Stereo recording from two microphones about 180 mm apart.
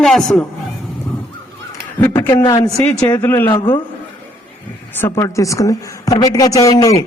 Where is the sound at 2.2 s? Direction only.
15° left (ahead or behind).